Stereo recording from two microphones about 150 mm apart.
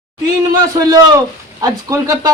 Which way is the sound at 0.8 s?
20° right (ahead or behind).